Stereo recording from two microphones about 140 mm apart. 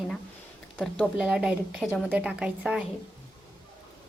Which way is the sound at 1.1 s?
5° right (ahead or behind).